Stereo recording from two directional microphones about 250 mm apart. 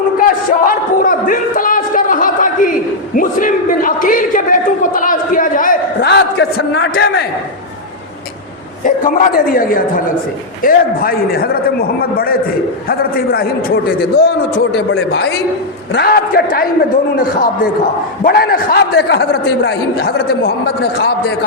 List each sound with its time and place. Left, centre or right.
0.2 s a sound: left
8.8 s a man's voice: left
18.2 s a man's voice: left